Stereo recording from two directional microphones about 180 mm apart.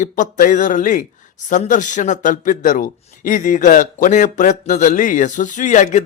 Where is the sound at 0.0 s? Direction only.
45° left (ahead or behind).